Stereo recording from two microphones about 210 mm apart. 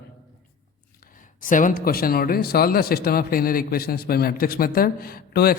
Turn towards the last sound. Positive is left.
turn(degrees=45)  # may be behind; listen again after turning